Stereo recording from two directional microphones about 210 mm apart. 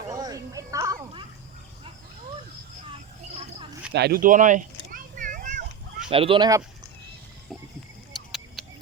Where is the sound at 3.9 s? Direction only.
50° right (ahead or behind).